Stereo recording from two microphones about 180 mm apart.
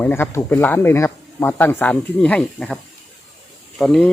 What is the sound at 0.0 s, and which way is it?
Speech, 10° left (ahead or behind).